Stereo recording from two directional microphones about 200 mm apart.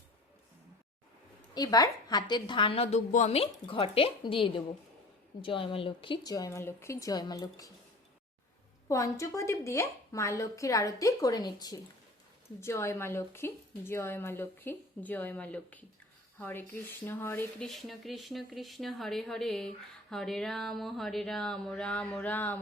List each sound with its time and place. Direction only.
1.5 s a woman's voice: 20° left (ahead or behind)
8.9 s a woman's voice: 15° left (ahead or behind)